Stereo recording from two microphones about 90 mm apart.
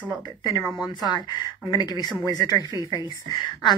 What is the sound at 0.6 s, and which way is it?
Speech, centre (ahead or behind).